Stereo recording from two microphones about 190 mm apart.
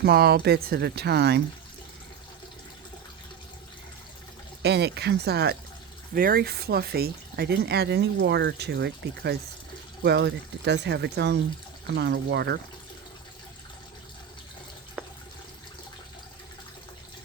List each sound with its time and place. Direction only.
0.0 s speech: 55° right (ahead or behind)
4.6 s speech: 60° right (ahead or behind)